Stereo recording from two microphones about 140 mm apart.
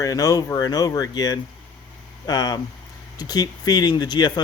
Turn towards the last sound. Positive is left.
turn(degrees=30)  # may be behind; listen again after turning